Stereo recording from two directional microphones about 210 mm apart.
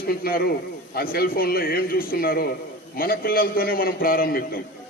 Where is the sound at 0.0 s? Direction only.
45° left (ahead or behind).